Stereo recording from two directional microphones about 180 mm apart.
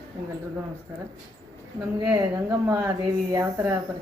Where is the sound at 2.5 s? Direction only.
15° right (ahead or behind).